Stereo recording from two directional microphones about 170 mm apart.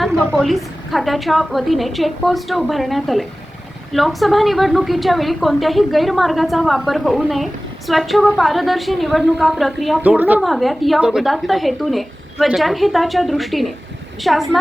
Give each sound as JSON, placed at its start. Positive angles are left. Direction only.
{"t": 0.0, "sound": "a woman's voice", "side_deg": 5}